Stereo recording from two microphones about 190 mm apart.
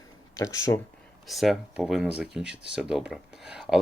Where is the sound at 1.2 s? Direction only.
Centre (ahead or behind).